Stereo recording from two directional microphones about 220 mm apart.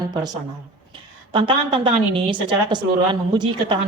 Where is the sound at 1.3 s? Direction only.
25° right (ahead or behind).